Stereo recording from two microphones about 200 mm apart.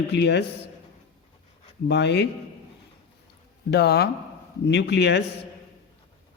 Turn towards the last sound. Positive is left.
turn(degrees=60)  # may be behind; listen again after turning